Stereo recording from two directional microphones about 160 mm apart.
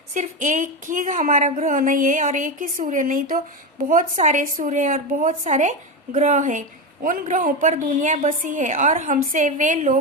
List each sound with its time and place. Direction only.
0.1 s a woman's voice: 50° right (ahead or behind)